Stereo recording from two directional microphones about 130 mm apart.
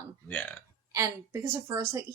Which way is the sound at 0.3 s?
15° left (ahead or behind).